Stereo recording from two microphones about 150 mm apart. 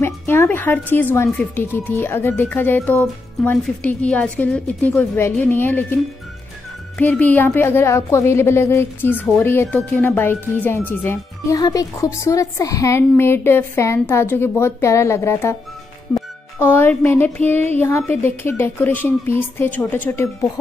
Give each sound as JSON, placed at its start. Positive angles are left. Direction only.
{"t": 0.0, "sound": "a woman's voice", "side_deg": 15}
{"t": 7.0, "sound": "a woman's voice", "side_deg": 10}
{"t": 16.2, "sound": "music", "side_deg": 15}
{"t": 17.7, "sound": "a woman's voice", "side_deg": 15}